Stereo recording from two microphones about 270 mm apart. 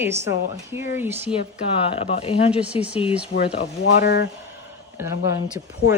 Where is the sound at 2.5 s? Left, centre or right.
Centre.